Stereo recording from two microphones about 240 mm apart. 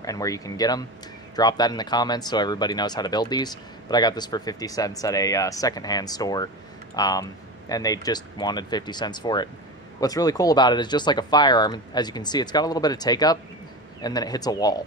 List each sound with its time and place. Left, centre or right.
0.0 s speech: centre